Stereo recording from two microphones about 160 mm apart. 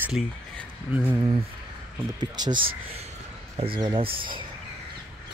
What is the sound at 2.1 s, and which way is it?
Speech, 25° right (ahead or behind).